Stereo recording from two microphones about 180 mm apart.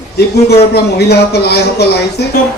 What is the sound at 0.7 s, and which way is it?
Speech, 60° left (ahead or behind).